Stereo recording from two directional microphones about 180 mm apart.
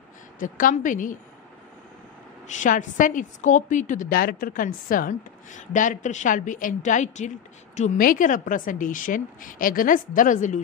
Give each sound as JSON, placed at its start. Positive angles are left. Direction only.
{"t": 0.4, "sound": "a woman's voice", "side_deg": 50}
{"t": 2.4, "sound": "a woman's voice", "side_deg": 45}